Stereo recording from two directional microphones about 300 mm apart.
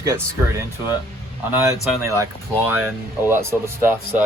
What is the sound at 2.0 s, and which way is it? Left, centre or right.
Speech, centre.